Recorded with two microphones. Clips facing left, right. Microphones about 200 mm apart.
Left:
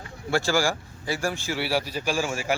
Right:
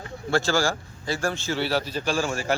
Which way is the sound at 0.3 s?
15° left (ahead or behind).